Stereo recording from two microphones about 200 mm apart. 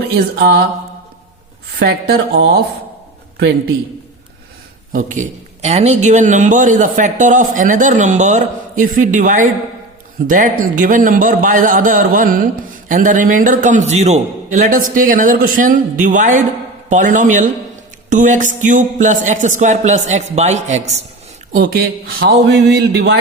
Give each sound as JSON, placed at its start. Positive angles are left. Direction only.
{"t": 0.1, "sound": "speech", "side_deg": -50}
{"t": 1.8, "sound": "speech", "side_deg": -50}
{"t": 4.9, "sound": "a man's voice", "side_deg": -40}
{"t": 21.5, "sound": "a man's voice", "side_deg": -45}